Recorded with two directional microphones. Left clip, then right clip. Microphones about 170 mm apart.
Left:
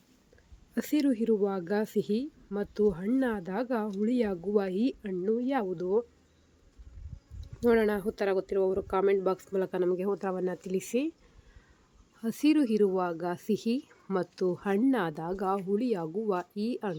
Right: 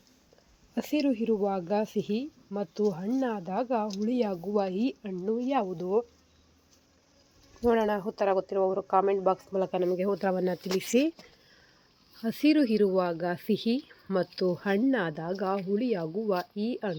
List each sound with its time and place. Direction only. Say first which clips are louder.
0.7 s speech: even; 5° left (ahead or behind)
7.6 s speech: even; 10° left (ahead or behind)
10.0 s speech: right 3 dB; 15° right (ahead or behind)
12.2 s speech: right 2 dB; 5° right (ahead or behind)